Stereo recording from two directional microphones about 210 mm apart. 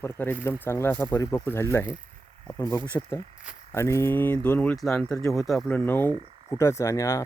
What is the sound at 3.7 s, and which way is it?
Speech, 10° left (ahead or behind).